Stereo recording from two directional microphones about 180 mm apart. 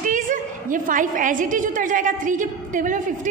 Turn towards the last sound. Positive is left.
turn(degrees=-45)  # may be behind; listen again after turning